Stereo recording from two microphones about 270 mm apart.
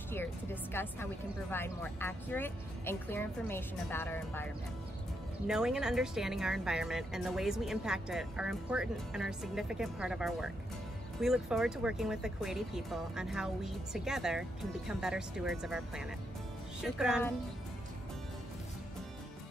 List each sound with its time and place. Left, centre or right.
0.8 s speech: centre
5.5 s speech: centre